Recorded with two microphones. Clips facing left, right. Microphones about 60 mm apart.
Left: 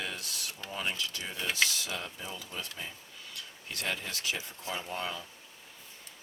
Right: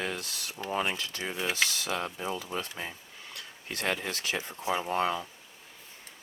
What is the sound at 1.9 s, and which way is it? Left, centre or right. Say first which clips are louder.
Speech: right 7 dB; right.